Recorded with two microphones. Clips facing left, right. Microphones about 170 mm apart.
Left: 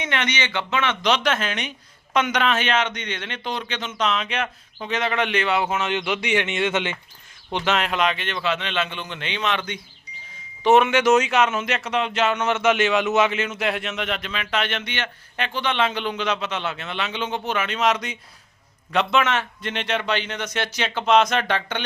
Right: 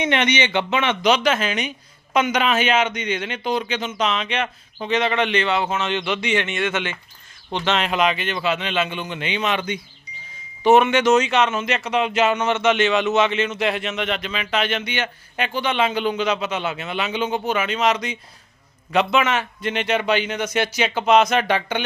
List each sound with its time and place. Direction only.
0.0 s a man's voice: 20° right (ahead or behind)
1.0 s speech: 5° right (ahead or behind); by 6.9 s 20° left (ahead or behind)
7.5 s a man's voice: 5° left (ahead or behind)